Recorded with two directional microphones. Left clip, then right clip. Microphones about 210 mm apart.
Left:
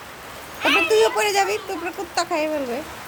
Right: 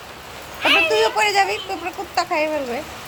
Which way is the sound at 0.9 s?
35° left (ahead or behind).